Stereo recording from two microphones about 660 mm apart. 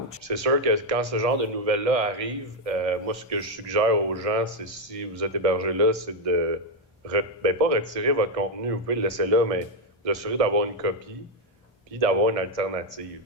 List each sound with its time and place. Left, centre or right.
0.3 s a man's voice: right
11.9 s a man's voice: right